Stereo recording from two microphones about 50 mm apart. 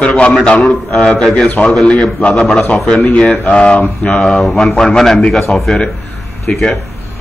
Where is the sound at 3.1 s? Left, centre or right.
Left.